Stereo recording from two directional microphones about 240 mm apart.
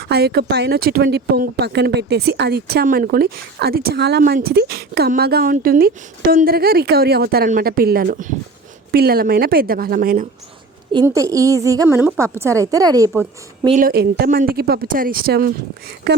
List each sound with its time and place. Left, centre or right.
0.0 s speech: right
10.9 s a woman's voice: centre
13.7 s speech: right